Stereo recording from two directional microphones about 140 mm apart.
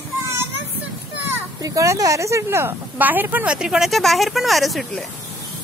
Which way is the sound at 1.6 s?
25° right (ahead or behind).